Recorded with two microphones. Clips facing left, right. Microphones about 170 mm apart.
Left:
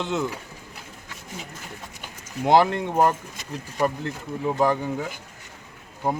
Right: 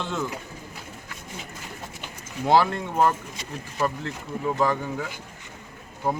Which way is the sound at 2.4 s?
20° left (ahead or behind).